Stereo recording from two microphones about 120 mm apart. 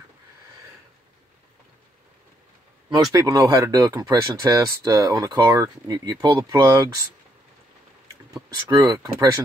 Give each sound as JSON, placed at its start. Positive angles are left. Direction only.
{"t": 3.1, "sound": "speech", "side_deg": -30}
{"t": 8.3, "sound": "speech", "side_deg": -30}